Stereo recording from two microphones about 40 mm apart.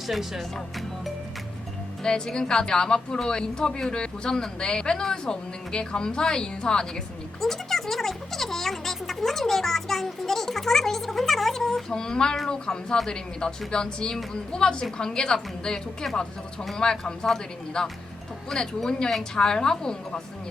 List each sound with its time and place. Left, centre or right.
0.1 s speech: centre
2.0 s speech: centre
7.4 s speech: centre
16.0 s speech: centre
16.7 s speech: centre